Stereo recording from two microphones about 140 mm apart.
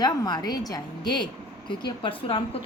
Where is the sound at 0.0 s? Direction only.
30° left (ahead or behind).